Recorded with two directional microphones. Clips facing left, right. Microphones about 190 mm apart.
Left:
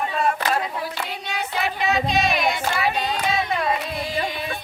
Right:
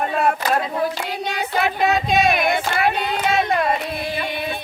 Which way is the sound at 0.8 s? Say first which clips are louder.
Right 6 dB; 50° right (ahead or behind).